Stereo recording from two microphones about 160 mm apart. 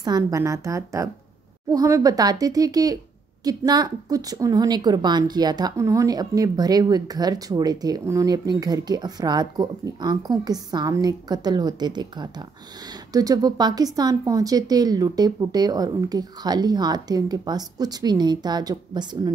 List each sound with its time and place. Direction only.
0.0 s a woman's voice: 20° right (ahead or behind)